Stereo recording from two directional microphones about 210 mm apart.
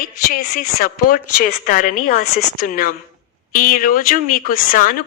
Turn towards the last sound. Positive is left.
turn(degrees=40)  # may be behind; listen again after turning